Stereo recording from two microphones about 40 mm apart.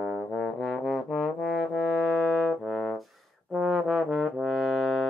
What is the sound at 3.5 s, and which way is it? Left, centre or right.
Trombone, centre.